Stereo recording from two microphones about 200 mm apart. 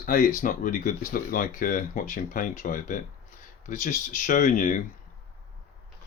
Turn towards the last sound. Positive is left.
turn(degrees=40)  # may be behind; listen again after turning